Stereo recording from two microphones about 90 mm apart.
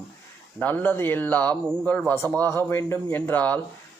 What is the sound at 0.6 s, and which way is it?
A man's voice, 20° left (ahead or behind).